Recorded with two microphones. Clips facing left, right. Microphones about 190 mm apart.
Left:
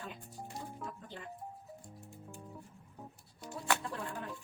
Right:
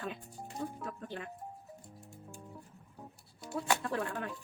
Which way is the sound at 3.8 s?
70° right (ahead or behind).